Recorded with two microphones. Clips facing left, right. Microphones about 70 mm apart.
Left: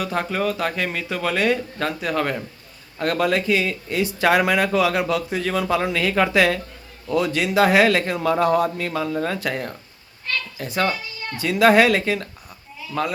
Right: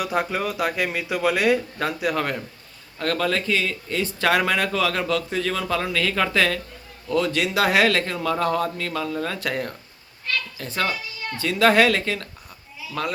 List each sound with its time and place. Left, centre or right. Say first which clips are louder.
0.0 s speech: left 1 dB; centre
3.0 s speech: left 3 dB; centre
9.4 s speech: left 1 dB; centre
10.3 s a sound: even; centre
10.6 s speech: left 7 dB; centre
12.8 s sheep: left 4 dB; centre